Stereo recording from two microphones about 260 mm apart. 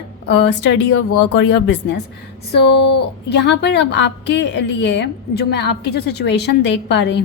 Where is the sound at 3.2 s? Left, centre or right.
Left.